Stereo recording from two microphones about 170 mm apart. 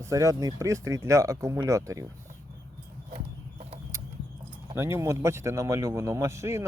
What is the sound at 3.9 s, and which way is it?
Horse, 20° right (ahead or behind).